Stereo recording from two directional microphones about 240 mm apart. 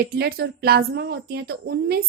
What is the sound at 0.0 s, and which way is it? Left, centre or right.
A woman's voice, right.